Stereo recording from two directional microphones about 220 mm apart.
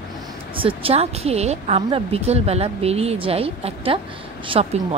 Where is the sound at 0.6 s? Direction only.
25° right (ahead or behind).